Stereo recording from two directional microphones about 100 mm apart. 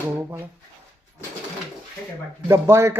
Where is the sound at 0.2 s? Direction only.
30° right (ahead or behind).